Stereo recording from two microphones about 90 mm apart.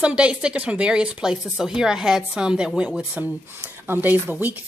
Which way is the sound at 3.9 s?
20° right (ahead or behind).